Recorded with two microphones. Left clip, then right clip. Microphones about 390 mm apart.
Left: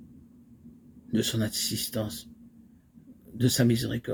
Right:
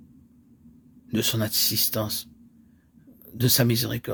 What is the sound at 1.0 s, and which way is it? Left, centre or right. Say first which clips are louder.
Speech: right 3 dB; right.